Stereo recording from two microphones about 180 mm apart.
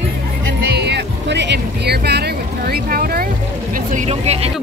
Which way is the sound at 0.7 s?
70° right (ahead or behind).